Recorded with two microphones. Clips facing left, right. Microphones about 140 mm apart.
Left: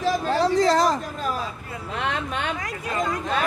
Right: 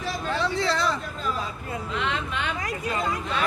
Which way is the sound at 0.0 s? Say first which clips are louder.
Left 6 dB; 40° left (ahead or behind).